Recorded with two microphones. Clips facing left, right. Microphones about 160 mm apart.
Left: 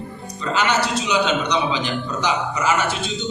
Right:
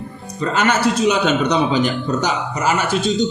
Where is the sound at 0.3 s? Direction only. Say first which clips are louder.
Right 3 dB; 50° right (ahead or behind).